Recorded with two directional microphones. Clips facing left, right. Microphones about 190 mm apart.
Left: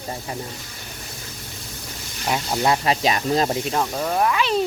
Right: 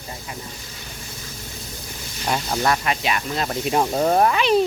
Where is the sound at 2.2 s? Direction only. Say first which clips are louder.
Even; 5° left (ahead or behind).